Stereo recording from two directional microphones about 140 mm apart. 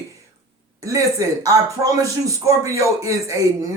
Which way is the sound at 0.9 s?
25° right (ahead or behind).